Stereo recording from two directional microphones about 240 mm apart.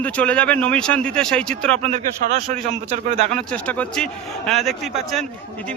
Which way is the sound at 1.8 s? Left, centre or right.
Right.